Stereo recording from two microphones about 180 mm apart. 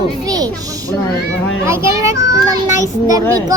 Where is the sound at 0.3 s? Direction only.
20° right (ahead or behind).